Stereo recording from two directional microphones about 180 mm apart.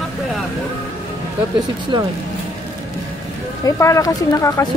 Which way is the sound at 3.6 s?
15° left (ahead or behind).